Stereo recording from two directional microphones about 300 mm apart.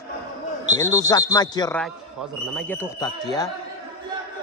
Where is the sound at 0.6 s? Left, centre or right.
Right.